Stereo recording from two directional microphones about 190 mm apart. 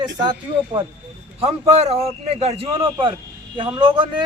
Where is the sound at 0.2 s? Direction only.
25° right (ahead or behind).